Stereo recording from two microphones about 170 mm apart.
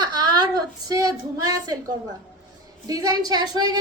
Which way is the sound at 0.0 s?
25° right (ahead or behind).